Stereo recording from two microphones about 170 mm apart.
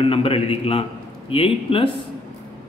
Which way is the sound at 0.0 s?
35° left (ahead or behind).